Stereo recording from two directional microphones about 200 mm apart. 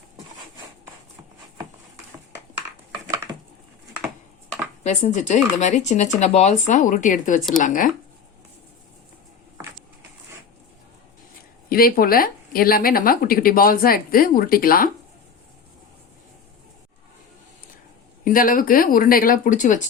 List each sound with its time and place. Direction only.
4.8 s speech: 35° left (ahead or behind)
11.7 s speech: 45° left (ahead or behind)
18.3 s speech: 45° left (ahead or behind)